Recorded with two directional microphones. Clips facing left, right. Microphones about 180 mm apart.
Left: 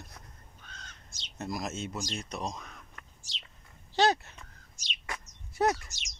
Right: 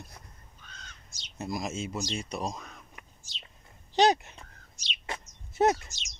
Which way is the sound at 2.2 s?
Centre (ahead or behind).